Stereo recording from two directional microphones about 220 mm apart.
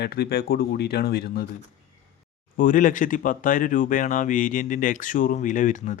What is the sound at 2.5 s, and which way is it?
Speech, 35° left (ahead or behind).